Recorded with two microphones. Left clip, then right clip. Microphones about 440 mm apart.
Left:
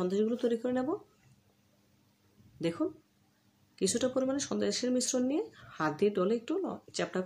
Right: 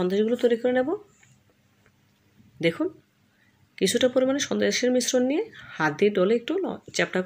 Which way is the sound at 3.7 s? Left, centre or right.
Right.